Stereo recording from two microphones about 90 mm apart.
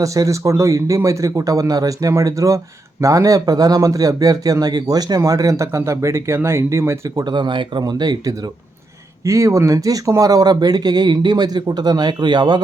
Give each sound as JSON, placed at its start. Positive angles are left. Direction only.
{"t": 0.0, "sound": "speech", "side_deg": -35}
{"t": 7.3, "sound": "speech", "side_deg": -60}
{"t": 9.2, "sound": "speech", "side_deg": -35}